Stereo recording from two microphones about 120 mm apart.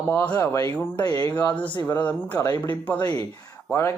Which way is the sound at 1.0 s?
30° left (ahead or behind).